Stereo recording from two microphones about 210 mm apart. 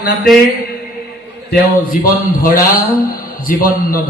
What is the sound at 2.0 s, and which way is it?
A man's voice, 40° left (ahead or behind).